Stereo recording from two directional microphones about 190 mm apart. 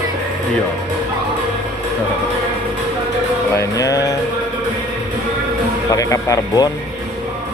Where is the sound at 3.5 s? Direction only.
15° left (ahead or behind).